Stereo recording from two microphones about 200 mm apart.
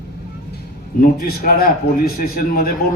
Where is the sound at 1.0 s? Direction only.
45° left (ahead or behind).